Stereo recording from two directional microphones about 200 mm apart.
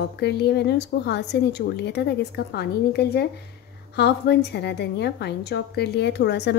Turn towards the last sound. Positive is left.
turn(degrees=60)  # may be behind; listen again after turning